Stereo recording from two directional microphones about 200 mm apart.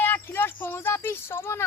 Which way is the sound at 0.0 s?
10° left (ahead or behind).